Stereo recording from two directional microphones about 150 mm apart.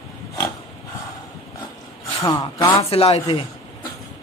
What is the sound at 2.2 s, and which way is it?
Speech, 25° left (ahead or behind).